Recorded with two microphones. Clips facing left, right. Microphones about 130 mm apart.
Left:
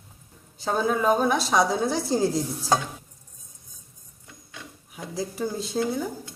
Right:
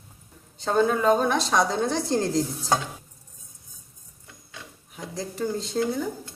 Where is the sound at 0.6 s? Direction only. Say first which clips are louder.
Right 2 dB; 5° left (ahead or behind).